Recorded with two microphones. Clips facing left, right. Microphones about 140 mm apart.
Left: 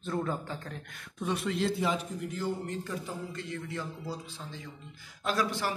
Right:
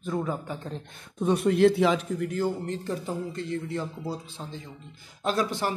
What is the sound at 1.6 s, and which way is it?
Speech, 75° right (ahead or behind).